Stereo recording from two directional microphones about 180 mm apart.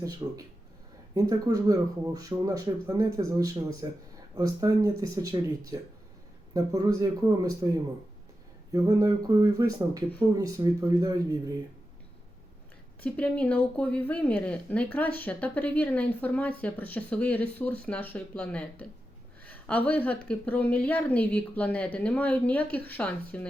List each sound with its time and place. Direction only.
0.0 s speech: 20° right (ahead or behind)
8.7 s speech: 20° right (ahead or behind)
13.0 s speech: 5° left (ahead or behind)